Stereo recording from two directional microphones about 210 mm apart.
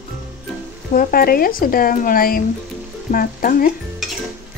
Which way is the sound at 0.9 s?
45° left (ahead or behind).